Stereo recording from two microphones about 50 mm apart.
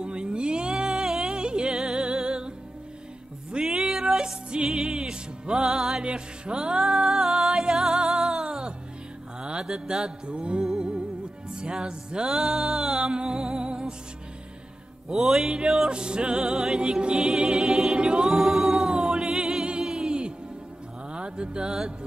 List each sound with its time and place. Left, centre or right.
0.0 s music: centre
3.5 s music: centre
8.5 s music: centre
9.4 s mantra: centre
10.6 s music: centre
15.0 s music: centre
17.9 s a capella: centre
21.1 s music: centre